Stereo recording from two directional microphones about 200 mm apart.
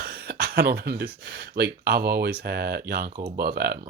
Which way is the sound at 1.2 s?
55° right (ahead or behind).